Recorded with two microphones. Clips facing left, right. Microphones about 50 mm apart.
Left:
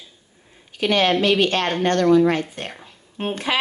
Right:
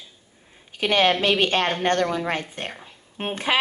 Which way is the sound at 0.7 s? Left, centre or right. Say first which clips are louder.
Left 1 dB; right.